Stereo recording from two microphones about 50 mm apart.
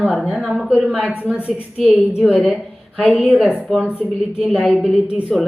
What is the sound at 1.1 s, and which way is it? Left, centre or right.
Speech, right.